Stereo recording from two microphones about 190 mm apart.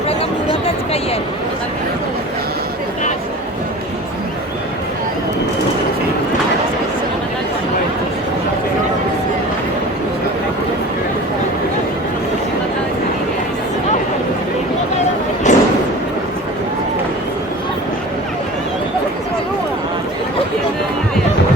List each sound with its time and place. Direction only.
15.5 s slam: 40° left (ahead or behind)